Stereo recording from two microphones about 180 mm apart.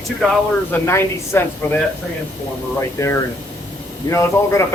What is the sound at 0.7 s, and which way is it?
Speech, 15° left (ahead or behind).